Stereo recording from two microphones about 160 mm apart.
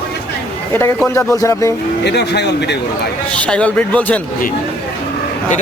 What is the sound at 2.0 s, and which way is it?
Speech, 90° left.